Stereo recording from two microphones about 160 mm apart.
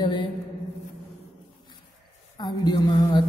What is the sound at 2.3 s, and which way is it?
Speech, 25° left (ahead or behind).